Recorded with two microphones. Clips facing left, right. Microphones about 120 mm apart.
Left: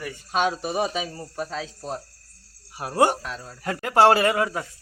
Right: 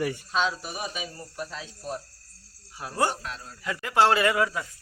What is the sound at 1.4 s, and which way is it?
Speech, 90° left.